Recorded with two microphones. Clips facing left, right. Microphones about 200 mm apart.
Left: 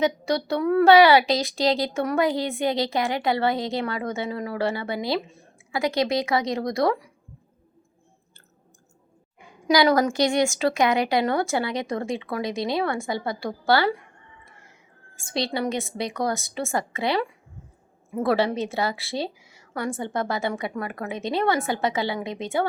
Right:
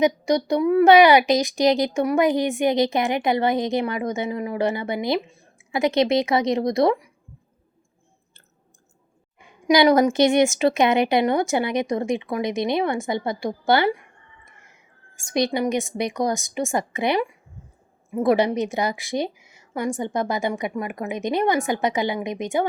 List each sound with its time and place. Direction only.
0.0 s speech: 15° right (ahead or behind)
9.6 s a woman's voice: 20° right (ahead or behind)